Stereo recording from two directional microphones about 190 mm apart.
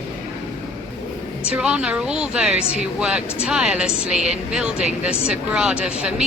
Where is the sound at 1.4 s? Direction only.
5° right (ahead or behind).